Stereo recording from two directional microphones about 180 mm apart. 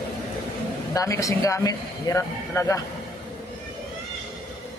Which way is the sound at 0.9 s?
20° left (ahead or behind).